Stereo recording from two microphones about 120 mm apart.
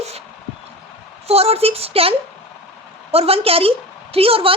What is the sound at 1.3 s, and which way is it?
A woman's voice, 55° right (ahead or behind).